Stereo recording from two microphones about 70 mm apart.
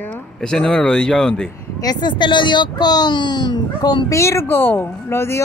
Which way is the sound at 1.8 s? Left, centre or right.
Left.